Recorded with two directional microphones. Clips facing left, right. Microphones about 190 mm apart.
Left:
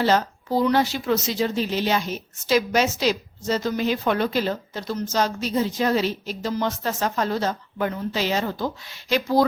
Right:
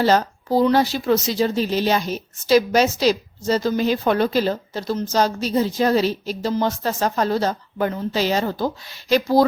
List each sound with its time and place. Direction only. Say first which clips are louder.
0.0 s a woman's voice: right 3 dB; 40° right (ahead or behind)